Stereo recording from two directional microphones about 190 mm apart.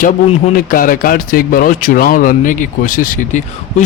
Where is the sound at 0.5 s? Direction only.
50° left (ahead or behind).